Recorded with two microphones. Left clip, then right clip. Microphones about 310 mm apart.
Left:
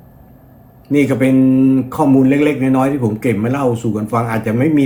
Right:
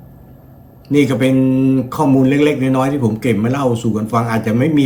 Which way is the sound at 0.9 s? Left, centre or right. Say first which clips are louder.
Even; centre.